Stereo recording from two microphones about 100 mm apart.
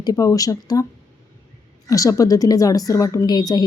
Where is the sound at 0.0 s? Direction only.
35° left (ahead or behind).